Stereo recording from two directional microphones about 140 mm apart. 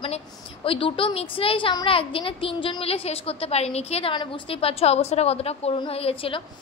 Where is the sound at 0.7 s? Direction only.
40° left (ahead or behind).